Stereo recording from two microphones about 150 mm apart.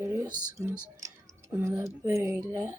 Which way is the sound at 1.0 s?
15° right (ahead or behind).